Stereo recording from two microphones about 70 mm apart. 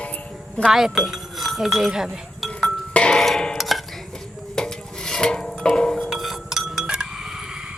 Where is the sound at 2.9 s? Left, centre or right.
Centre.